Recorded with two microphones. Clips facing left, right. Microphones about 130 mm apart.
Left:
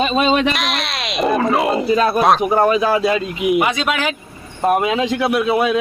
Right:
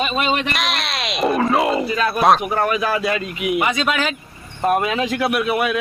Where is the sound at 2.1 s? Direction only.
Centre (ahead or behind).